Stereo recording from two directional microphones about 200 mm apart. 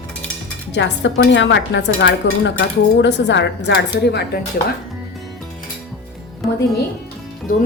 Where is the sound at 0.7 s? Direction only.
65° left (ahead or behind).